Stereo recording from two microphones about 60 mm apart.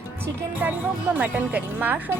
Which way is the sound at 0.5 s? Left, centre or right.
Right.